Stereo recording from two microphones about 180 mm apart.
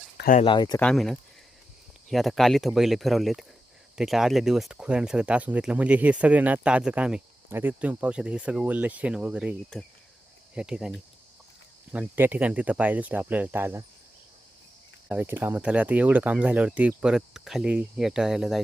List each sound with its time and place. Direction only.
0.2 s speech: 50° left (ahead or behind)
0.4 s speech: 25° left (ahead or behind)
0.8 s speech: 5° left (ahead or behind)
15.1 s speech: 10° right (ahead or behind)